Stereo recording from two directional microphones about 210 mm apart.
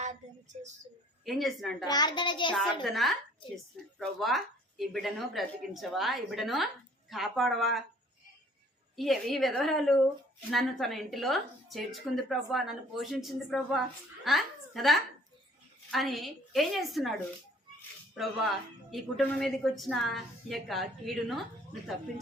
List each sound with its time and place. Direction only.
0.0 s speech: 35° right (ahead or behind)
1.2 s speech: centre (ahead or behind)
1.8 s a child's voice: 20° left (ahead or behind)
2.8 s speech: centre (ahead or behind)
9.0 s a woman's voice: centre (ahead or behind)